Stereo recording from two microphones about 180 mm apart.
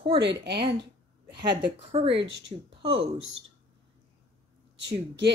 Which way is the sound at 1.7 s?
35° right (ahead or behind).